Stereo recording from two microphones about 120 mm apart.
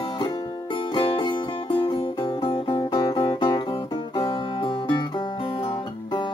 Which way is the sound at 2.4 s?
40° left (ahead or behind).